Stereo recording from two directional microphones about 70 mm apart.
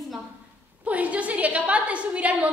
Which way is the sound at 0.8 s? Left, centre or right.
Right.